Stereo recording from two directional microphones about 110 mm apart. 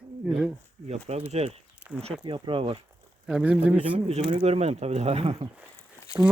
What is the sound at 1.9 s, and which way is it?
Speech, 5° right (ahead or behind).